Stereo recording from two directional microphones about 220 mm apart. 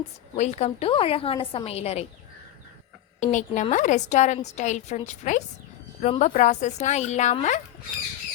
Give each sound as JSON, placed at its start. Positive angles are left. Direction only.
{"t": 0.3, "sound": "a woman's voice", "side_deg": 30}
{"t": 3.2, "sound": "speech", "side_deg": 35}